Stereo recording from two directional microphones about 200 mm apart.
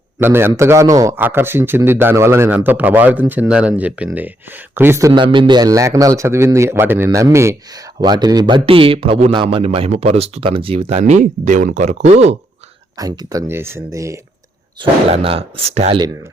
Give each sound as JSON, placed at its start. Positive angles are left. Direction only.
{"t": 0.2, "sound": "a man's voice", "side_deg": -10}
{"t": 13.0, "sound": "a man's voice", "side_deg": -20}
{"t": 14.8, "sound": "a man's voice", "side_deg": -30}